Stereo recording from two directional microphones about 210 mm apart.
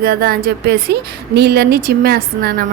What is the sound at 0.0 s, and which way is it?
A woman's voice, 45° right (ahead or behind).